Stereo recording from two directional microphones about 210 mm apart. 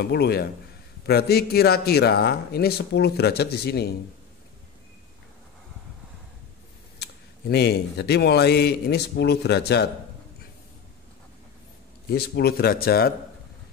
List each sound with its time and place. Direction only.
0.0 s speech: 50° left (ahead or behind)
7.0 s speech: 50° left (ahead or behind)
12.1 s speech: 50° left (ahead or behind)